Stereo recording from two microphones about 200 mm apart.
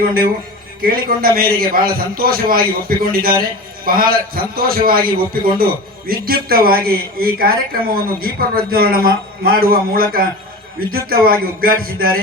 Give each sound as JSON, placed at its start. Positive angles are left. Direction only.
{"t": 0.0, "sound": "a man's voice", "side_deg": -45}